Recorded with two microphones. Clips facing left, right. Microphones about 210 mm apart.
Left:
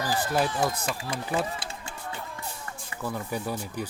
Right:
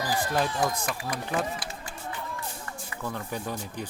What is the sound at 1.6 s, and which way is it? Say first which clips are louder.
Music: even; 25° left (ahead or behind).